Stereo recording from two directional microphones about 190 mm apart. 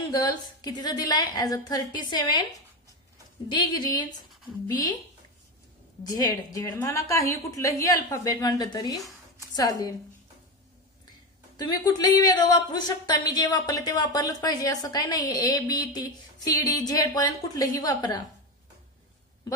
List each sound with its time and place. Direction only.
0.0 s speech: 20° left (ahead or behind)
3.4 s speech: 25° left (ahead or behind)
6.0 s a woman's voice: 20° left (ahead or behind)
11.5 s speech: 20° left (ahead or behind)